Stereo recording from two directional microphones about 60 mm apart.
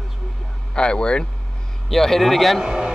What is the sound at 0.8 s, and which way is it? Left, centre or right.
Speech, centre.